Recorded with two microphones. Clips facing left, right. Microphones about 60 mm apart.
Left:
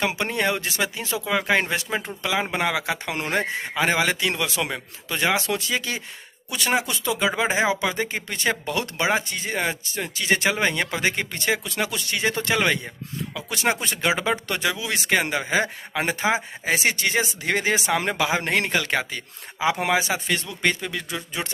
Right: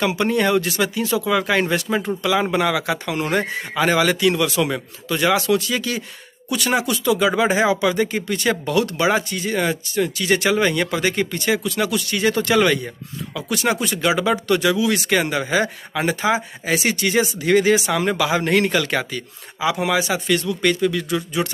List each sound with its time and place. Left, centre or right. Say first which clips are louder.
0.0 s speech: right 5 dB; left
19.6 s speech: right 2 dB; left